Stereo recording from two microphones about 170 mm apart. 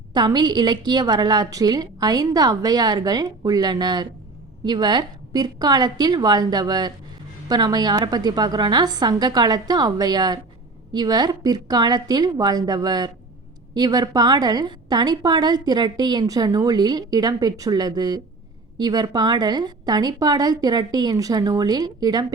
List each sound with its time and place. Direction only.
0.1 s a woman's voice: 25° right (ahead or behind)